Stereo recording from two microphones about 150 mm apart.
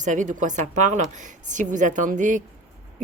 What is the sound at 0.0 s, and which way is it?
A woman's voice, 55° right (ahead or behind).